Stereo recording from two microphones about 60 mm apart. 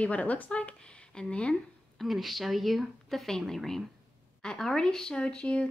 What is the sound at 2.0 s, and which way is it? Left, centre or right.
A woman's voice, centre.